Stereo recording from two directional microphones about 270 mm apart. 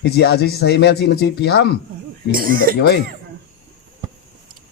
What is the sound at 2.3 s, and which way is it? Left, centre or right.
Speech, right.